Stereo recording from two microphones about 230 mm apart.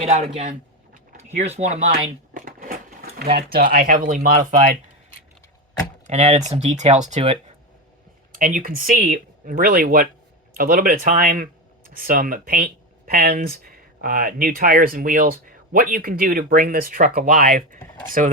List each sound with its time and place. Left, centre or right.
0.0 s speech: right
2.3 s a sound: right
3.3 s speech: right
6.1 s speech: right
8.3 s speech: right